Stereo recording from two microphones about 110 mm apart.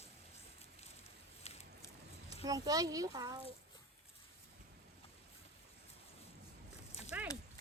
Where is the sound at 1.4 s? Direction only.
70° left (ahead or behind).